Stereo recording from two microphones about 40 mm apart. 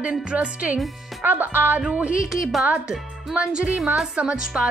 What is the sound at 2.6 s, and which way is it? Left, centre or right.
A woman's voice, right.